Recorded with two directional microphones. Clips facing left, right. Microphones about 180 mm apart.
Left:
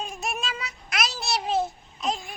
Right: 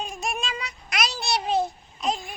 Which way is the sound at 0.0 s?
Centre (ahead or behind).